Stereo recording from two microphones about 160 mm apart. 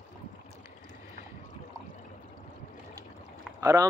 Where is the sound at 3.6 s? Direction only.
20° right (ahead or behind).